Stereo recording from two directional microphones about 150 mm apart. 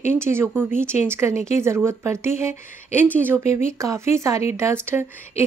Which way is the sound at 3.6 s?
20° right (ahead or behind).